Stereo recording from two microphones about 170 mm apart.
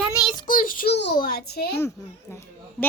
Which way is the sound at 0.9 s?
75° left (ahead or behind).